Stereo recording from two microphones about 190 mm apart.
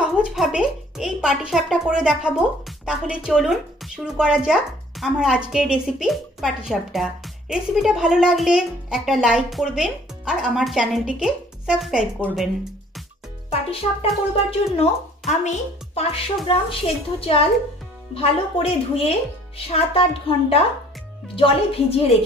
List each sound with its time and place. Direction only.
0.0 s speech: 5° right (ahead or behind)
13.5 s a woman's voice: 30° left (ahead or behind)